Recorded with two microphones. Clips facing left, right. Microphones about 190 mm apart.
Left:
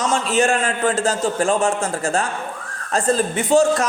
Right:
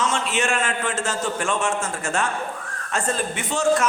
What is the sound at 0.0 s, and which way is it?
A man's voice, 35° left (ahead or behind).